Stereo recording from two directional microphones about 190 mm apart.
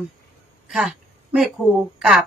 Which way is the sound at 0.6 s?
5° right (ahead or behind).